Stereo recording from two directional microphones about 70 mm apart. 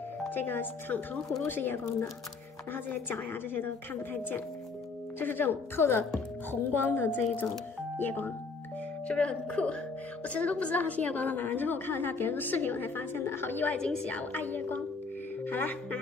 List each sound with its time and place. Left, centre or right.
0.3 s a woman's voice: left